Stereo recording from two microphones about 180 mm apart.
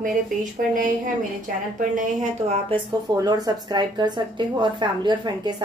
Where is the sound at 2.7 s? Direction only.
20° right (ahead or behind).